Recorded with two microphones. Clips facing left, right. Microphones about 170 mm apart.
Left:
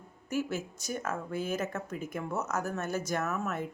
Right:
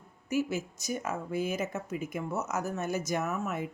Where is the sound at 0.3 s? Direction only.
10° right (ahead or behind).